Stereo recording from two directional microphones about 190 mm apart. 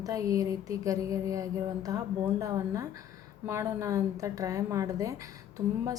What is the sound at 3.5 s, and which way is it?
A woman's voice, 15° right (ahead or behind).